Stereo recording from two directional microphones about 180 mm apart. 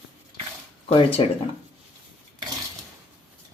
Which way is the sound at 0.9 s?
30° left (ahead or behind).